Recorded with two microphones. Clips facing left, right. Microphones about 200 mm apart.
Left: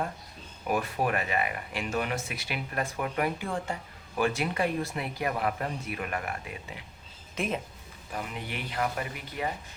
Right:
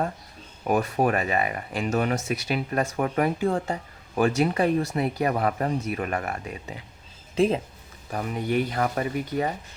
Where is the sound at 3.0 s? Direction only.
45° right (ahead or behind).